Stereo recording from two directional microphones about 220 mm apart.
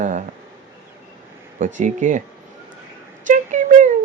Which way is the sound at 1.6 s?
35° right (ahead or behind).